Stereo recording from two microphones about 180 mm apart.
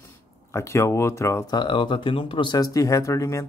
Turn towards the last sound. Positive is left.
turn(degrees=15)  # may be behind; listen again after turning